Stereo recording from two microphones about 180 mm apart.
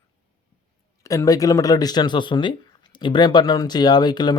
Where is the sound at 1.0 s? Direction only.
20° left (ahead or behind).